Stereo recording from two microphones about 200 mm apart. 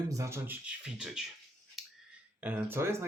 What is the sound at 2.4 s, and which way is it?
Speech, 10° right (ahead or behind).